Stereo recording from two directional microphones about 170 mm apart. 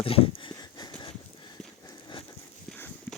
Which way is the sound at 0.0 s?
35° left (ahead or behind).